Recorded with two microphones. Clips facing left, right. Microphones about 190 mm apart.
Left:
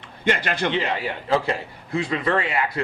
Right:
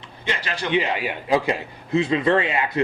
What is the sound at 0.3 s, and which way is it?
Speech, 55° left (ahead or behind).